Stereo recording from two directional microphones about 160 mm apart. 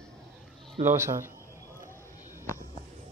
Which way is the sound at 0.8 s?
15° right (ahead or behind).